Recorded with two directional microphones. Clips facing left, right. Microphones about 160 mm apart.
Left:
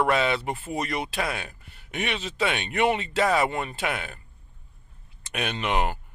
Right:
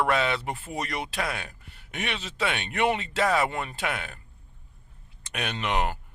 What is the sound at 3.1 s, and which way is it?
Speech, 20° left (ahead or behind).